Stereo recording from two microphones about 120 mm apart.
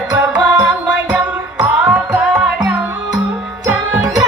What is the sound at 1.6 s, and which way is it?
Music, 15° right (ahead or behind).